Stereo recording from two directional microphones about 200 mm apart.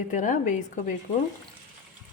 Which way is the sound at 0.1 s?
40° left (ahead or behind).